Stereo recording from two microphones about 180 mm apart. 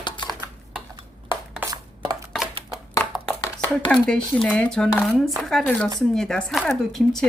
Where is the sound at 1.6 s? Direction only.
10° right (ahead or behind).